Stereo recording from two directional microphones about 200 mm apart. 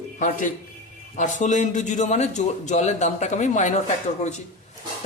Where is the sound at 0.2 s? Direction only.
40° left (ahead or behind).